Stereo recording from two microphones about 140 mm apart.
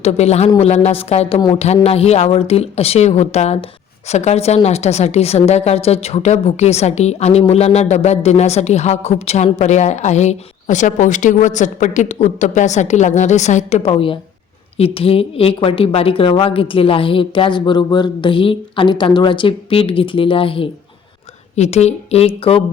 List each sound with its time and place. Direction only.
0.0 s a woman's voice: 50° left (ahead or behind)
14.8 s a woman's voice: 45° left (ahead or behind)
21.5 s a woman's voice: 50° left (ahead or behind)